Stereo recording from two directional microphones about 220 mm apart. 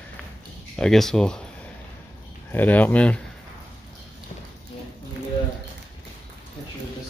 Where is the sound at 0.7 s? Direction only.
Centre (ahead or behind).